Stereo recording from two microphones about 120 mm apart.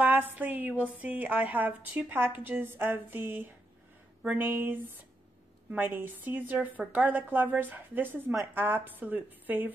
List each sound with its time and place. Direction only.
0.0 s a woman's voice: 15° right (ahead or behind)